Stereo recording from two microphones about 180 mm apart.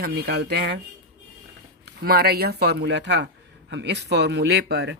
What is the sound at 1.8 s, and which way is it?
Speech, 60° right (ahead or behind).